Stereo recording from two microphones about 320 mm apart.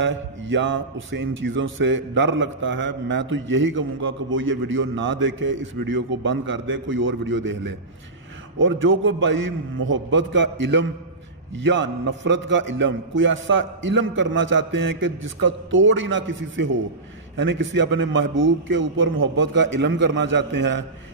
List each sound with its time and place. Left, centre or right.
0.0 s a man's voice: right
8.5 s a man's voice: right